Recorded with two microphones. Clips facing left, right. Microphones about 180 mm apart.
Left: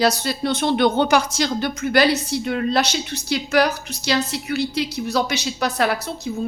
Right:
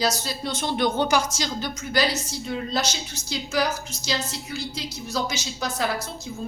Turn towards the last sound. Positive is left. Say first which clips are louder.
# left 6 dB
turn(degrees=65)  # may be behind; listen again after turning